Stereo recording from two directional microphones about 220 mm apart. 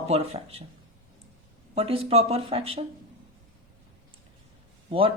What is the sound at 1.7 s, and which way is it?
Speech, 25° right (ahead or behind).